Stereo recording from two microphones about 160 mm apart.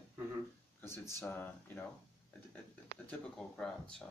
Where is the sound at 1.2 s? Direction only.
15° left (ahead or behind).